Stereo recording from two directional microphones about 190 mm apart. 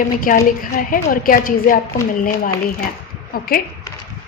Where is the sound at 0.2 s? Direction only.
45° left (ahead or behind).